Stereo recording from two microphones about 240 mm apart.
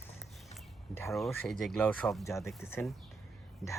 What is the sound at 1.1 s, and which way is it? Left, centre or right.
Speech, centre.